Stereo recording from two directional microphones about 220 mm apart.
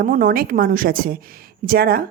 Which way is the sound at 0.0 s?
40° right (ahead or behind).